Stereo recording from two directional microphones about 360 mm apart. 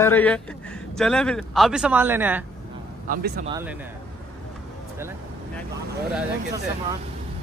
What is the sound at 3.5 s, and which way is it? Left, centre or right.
Speech, centre.